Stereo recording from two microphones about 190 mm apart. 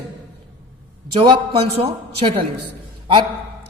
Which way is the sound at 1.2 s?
30° right (ahead or behind).